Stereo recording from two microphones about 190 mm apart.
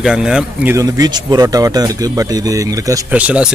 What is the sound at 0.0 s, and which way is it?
Speech, 5° right (ahead or behind).